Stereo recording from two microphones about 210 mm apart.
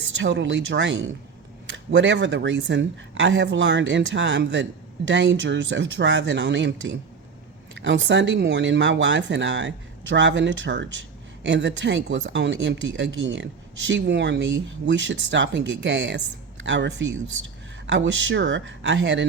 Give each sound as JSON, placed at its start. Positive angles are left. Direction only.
{"t": 0.2, "sound": "speech", "side_deg": -60}